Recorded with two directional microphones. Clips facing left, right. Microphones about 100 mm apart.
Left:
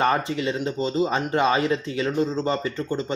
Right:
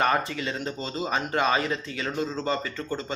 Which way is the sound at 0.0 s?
25° left (ahead or behind).